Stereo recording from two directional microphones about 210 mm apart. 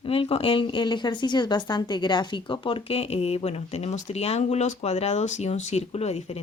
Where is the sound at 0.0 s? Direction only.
25° left (ahead or behind).